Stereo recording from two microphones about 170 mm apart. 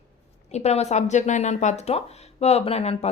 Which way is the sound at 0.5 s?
40° left (ahead or behind).